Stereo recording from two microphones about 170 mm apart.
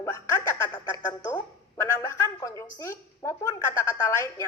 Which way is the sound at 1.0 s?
15° left (ahead or behind).